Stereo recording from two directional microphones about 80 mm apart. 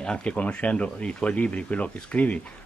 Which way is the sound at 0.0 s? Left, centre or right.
Centre.